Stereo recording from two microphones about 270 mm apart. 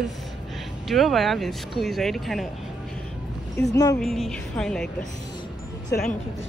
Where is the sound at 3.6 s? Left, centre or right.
Centre.